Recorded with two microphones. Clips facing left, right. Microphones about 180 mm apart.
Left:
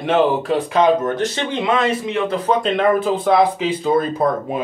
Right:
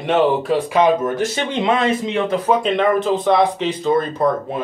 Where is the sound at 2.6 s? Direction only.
Centre (ahead or behind).